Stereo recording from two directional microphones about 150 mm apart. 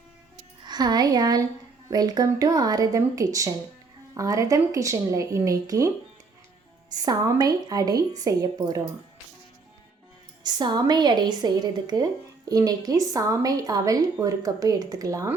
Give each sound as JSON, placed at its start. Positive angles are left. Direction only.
{"t": 0.6, "sound": "a woman's voice", "side_deg": -30}
{"t": 6.9, "sound": "a woman's voice", "side_deg": -25}
{"t": 10.4, "sound": "a woman's voice", "side_deg": -30}